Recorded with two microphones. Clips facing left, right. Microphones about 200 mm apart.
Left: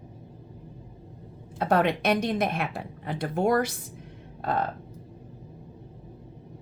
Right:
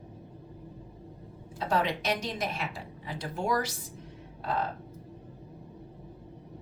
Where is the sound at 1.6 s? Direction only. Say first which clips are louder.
Left 6 dB; 60° left (ahead or behind).